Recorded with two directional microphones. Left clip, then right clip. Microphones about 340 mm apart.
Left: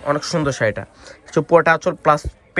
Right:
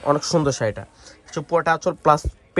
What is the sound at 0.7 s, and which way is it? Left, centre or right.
Speech, centre.